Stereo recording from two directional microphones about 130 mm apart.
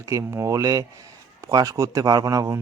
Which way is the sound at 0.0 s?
25° right (ahead or behind).